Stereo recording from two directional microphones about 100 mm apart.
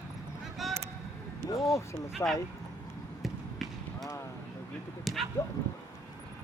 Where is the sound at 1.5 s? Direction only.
30° left (ahead or behind).